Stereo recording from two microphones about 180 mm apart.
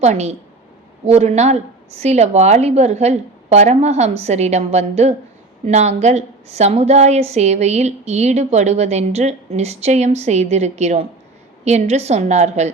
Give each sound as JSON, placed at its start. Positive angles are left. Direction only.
{"t": 0.0, "sound": "a woman's voice", "side_deg": -35}